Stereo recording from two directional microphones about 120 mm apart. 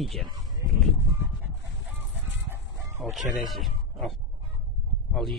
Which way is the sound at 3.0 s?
Centre (ahead or behind).